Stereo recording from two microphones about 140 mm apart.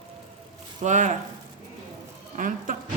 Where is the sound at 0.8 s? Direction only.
60° right (ahead or behind).